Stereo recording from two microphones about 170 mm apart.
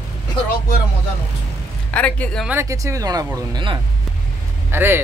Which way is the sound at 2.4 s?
15° right (ahead or behind).